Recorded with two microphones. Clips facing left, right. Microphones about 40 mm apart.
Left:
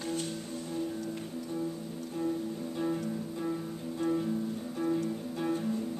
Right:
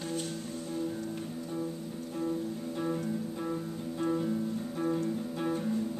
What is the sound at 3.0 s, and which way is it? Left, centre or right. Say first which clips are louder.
Music: right 1 dB; centre.